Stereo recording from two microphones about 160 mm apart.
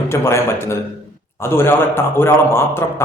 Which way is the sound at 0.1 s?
15° left (ahead or behind).